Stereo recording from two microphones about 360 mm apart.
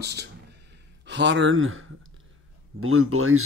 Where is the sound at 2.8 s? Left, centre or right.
Right.